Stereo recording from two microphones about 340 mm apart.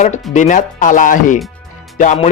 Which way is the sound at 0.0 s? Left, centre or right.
Left.